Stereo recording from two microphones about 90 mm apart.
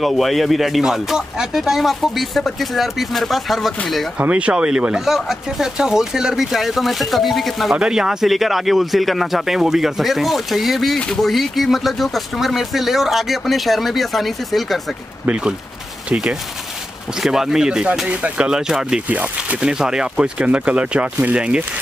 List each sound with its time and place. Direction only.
0.0 s speech: centre (ahead or behind)
4.2 s speech: 15° right (ahead or behind); by 14.8 s centre (ahead or behind)
15.2 s speech: 10° right (ahead or behind)
17.2 s speech: 5° right (ahead or behind)